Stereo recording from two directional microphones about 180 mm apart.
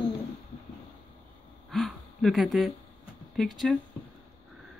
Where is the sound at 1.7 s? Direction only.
Centre (ahead or behind).